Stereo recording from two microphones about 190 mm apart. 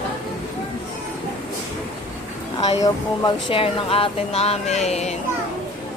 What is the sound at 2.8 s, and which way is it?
Speech, 25° left (ahead or behind).